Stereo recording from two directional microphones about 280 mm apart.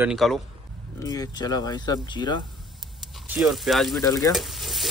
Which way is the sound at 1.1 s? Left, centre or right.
Centre.